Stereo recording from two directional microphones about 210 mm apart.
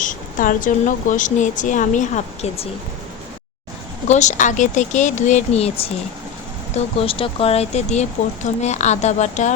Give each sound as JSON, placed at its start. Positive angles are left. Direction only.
{"t": 0.0, "sound": "speech", "side_deg": 40}
{"t": 4.1, "sound": "speech", "side_deg": 35}